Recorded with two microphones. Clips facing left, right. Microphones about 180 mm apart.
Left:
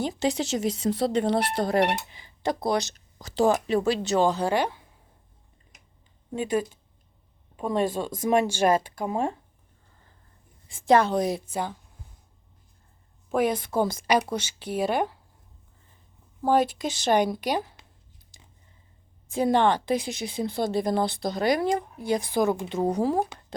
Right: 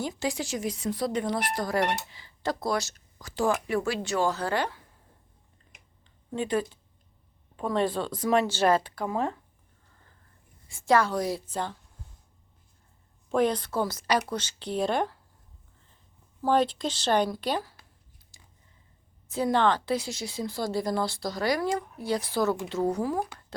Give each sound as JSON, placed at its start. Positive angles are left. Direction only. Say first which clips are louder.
{"t": 0.2, "sound": "a woman's voice", "louder": "left 5 dB", "side_deg": 20}
{"t": 2.0, "sound": "a sound", "louder": "left 3 dB", "side_deg": 20}
{"t": 2.6, "sound": "a woman's voice", "louder": "left 3 dB", "side_deg": 20}
{"t": 6.3, "sound": "speech", "louder": "left 2 dB", "side_deg": 10}
{"t": 10.7, "sound": "a woman's voice", "louder": "left 3 dB", "side_deg": 20}
{"t": 11.4, "sound": "speech", "louder": "left 2 dB", "side_deg": 10}
{"t": 13.3, "sound": "speech", "louder": "left 1 dB", "side_deg": 10}
{"t": 16.5, "sound": "speech", "louder": "left 2 dB", "side_deg": 10}
{"t": 19.3, "sound": "a woman's voice", "louder": "left 3 dB", "side_deg": 15}